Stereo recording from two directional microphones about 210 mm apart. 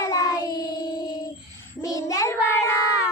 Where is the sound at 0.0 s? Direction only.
15° left (ahead or behind).